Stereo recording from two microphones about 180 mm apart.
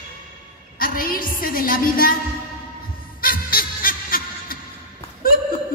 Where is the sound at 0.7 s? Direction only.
50° left (ahead or behind).